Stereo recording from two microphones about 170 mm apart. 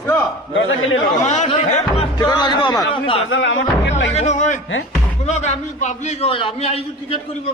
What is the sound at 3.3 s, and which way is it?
Speech, 90° left.